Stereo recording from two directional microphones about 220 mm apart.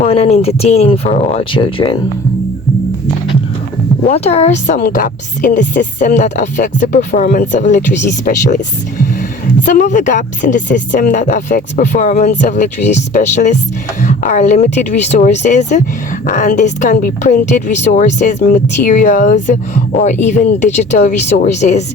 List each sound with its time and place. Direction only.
0.0 s speech: 30° left (ahead or behind)
4.0 s speech: 30° left (ahead or behind)
9.6 s speech: 35° left (ahead or behind)